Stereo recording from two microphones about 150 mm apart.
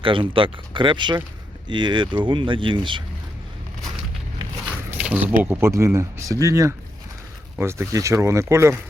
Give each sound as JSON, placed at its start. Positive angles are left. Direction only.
{"t": 0.0, "sound": "speech", "side_deg": -35}
{"t": 4.9, "sound": "speech", "side_deg": -10}